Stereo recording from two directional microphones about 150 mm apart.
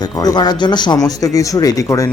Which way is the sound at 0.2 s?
25° left (ahead or behind).